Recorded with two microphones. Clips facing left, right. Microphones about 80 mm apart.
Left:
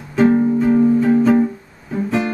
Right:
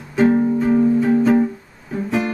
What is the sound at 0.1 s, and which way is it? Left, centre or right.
Music, centre.